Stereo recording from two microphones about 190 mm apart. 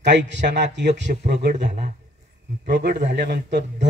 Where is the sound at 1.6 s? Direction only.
40° right (ahead or behind).